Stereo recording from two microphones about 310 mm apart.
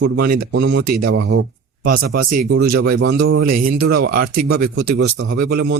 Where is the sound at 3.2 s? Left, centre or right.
Right.